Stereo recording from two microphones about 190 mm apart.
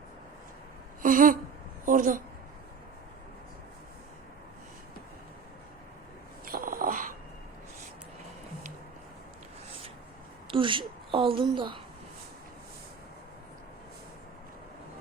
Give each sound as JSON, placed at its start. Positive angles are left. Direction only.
{"t": 1.0, "sound": "a sound", "side_deg": -45}
{"t": 6.4, "sound": "dog", "side_deg": -50}
{"t": 10.5, "sound": "a woman's voice", "side_deg": -25}